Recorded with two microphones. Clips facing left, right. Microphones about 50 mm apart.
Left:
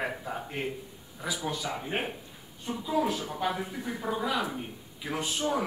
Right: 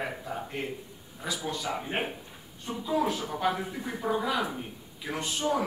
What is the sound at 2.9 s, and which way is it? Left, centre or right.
A man's voice, centre.